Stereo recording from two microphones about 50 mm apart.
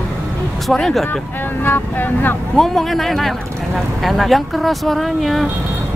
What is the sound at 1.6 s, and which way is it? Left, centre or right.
Speech, left.